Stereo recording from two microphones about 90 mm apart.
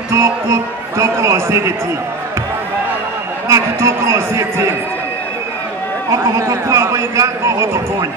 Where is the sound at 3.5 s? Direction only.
30° right (ahead or behind).